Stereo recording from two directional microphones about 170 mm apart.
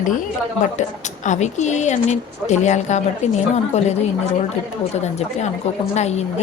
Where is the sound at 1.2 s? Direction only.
45° left (ahead or behind).